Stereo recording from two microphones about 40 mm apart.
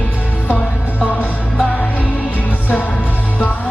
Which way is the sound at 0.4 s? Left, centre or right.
Left.